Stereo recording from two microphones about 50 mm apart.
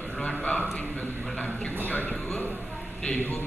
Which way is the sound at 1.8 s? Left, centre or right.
Left.